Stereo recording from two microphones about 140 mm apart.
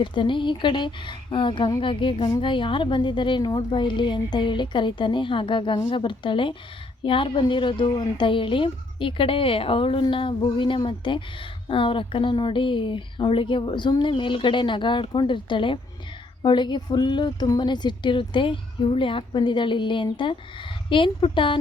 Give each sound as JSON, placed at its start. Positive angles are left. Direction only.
{"t": 0.0, "sound": "speech", "side_deg": 35}